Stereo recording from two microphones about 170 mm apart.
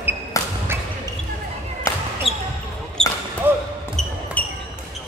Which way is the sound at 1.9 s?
20° left (ahead or behind).